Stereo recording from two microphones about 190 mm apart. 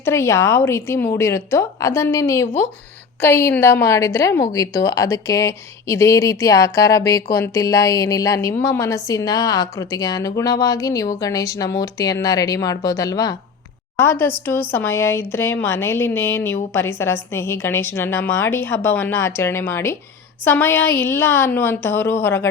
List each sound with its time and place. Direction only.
0.0 s a woman's voice: 15° left (ahead or behind)